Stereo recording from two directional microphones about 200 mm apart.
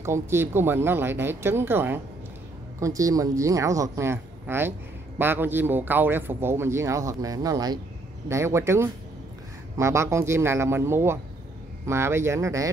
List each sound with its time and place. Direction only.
0.0 s a man's voice: 15° right (ahead or behind)